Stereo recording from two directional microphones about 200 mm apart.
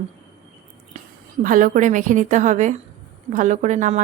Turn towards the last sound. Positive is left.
turn(degrees=-40)  # may be behind; listen again after turning